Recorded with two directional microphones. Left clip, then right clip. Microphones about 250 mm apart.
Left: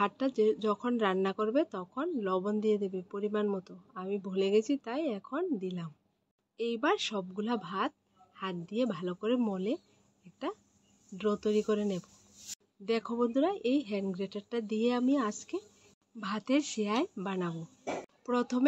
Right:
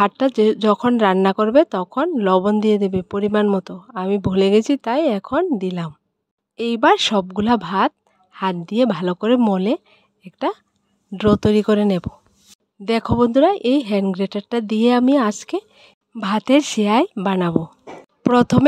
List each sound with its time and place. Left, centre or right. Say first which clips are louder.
0.0 s speech: right 13 dB; right